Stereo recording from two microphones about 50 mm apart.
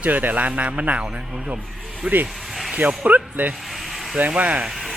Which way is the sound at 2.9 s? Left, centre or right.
Right.